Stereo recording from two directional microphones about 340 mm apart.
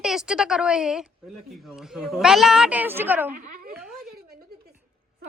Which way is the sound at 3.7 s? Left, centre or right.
Centre.